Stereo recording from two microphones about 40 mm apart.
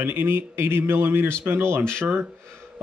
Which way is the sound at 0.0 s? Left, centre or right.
Right.